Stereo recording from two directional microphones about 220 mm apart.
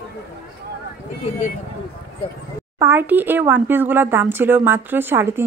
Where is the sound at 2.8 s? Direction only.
10° right (ahead or behind).